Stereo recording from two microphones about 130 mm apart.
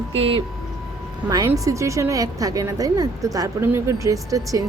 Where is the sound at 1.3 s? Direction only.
25° right (ahead or behind).